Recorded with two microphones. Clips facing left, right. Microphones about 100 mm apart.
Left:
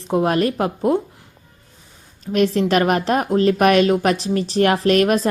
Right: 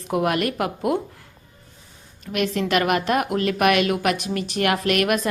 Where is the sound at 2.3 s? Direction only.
35° left (ahead or behind).